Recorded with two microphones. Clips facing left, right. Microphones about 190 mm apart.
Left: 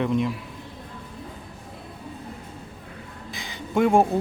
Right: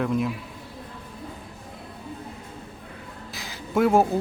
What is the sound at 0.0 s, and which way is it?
Speech, centre (ahead or behind).